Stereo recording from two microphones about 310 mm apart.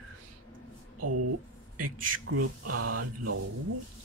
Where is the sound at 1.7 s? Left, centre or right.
Right.